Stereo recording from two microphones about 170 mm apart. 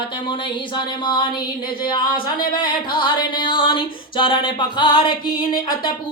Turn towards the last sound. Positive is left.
turn(degrees=25)  # may be behind; listen again after turning